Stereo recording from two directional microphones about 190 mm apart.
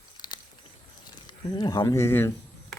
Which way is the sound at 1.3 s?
20° left (ahead or behind).